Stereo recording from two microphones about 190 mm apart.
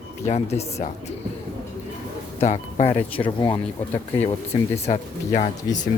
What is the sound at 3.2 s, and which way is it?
Speech, 25° left (ahead or behind).